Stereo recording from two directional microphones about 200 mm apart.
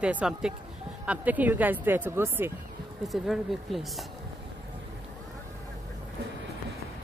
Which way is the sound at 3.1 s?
Centre (ahead or behind).